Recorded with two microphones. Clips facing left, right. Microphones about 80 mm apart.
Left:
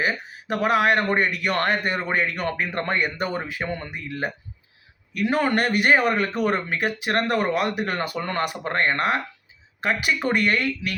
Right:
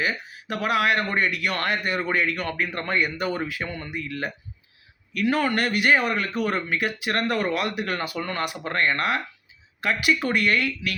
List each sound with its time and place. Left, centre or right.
0.0 s a man's voice: left